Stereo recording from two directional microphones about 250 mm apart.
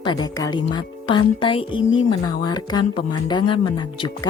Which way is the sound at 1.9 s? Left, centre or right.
Left.